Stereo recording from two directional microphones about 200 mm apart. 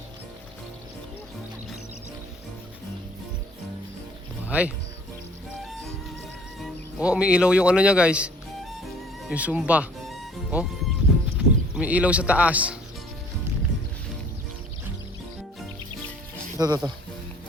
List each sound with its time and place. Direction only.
4.4 s speech: 5° right (ahead or behind)
6.6 s speech: 5° right (ahead or behind)
9.3 s music: 5° right (ahead or behind)
11.3 s speech: 5° right (ahead or behind)
16.6 s speech: 20° right (ahead or behind)